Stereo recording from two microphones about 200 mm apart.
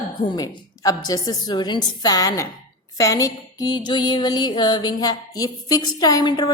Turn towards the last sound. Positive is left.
turn(degrees=20)  # may be behind; listen again after turning